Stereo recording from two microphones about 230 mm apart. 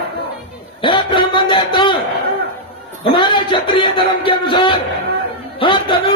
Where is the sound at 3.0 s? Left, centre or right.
Left.